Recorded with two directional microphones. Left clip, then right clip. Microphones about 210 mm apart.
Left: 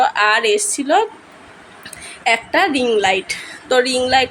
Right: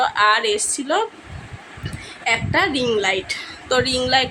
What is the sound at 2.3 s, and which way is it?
A woman's voice, 10° left (ahead or behind).